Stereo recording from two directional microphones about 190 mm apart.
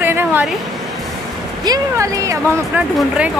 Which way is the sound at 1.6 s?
20° right (ahead or behind).